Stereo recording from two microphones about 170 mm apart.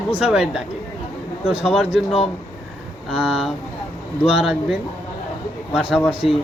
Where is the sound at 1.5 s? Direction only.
35° left (ahead or behind).